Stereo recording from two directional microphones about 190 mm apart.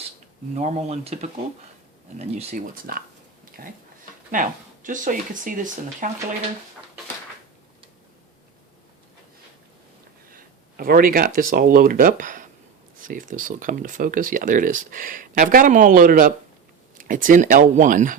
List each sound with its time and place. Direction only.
0.5 s speech: 35° right (ahead or behind)
10.2 s speech: 50° right (ahead or behind)